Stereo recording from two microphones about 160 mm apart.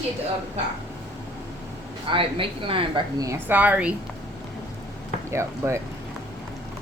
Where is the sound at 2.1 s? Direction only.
35° right (ahead or behind).